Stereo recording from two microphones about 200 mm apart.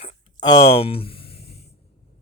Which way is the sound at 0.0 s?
20° left (ahead or behind).